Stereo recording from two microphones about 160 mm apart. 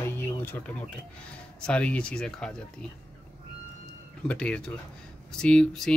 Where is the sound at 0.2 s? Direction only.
10° left (ahead or behind).